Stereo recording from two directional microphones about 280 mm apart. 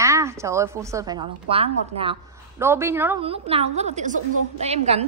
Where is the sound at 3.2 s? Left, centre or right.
Centre.